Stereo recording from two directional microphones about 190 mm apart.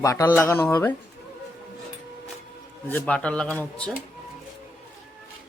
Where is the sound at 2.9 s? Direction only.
10° left (ahead or behind).